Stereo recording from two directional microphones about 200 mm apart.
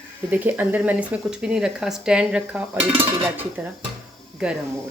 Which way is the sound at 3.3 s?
10° right (ahead or behind).